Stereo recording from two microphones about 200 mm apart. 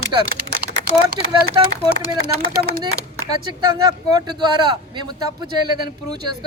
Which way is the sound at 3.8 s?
20° right (ahead or behind).